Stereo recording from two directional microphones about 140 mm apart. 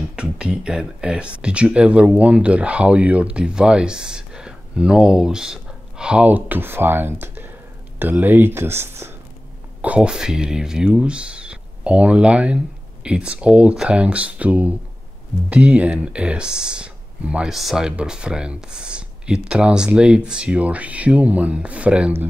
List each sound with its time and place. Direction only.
0.1 s speech: 5° right (ahead or behind)